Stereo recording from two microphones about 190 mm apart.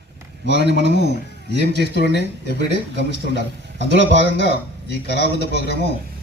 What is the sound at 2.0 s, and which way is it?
Speech, 65° right (ahead or behind).